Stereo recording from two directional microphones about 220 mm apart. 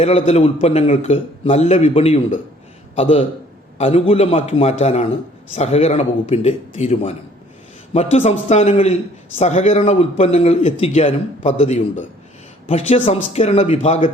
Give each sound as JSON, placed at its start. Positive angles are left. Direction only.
{"t": 0.0, "sound": "a man's voice", "side_deg": 30}